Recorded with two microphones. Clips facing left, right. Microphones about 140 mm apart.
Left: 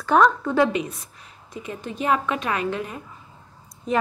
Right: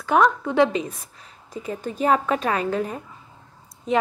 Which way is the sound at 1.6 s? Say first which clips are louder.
Right 3 dB; 35° right (ahead or behind).